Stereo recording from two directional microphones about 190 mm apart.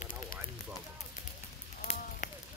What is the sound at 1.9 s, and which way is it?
Run, 35° left (ahead or behind).